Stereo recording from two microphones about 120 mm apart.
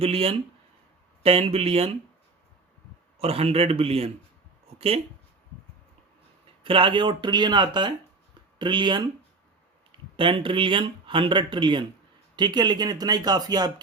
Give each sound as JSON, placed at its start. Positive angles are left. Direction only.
{"t": 0.0, "sound": "a man's voice", "side_deg": -55}
{"t": 3.2, "sound": "a man's voice", "side_deg": -55}
{"t": 6.6, "sound": "speech", "side_deg": -45}
{"t": 10.2, "sound": "speech", "side_deg": -45}